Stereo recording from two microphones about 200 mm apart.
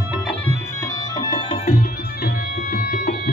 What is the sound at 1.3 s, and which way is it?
Music, 25° left (ahead or behind).